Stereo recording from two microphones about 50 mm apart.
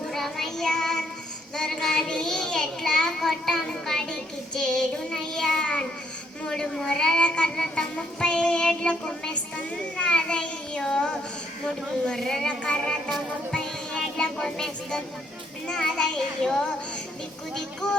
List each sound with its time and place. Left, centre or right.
0.0 s child singing: centre
1.5 s a woman's voice: centre
12.8 s a woman's voice: centre
14.2 s a woman's voice: centre